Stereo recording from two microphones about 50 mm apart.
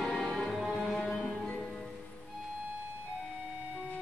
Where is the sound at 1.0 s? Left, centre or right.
Centre.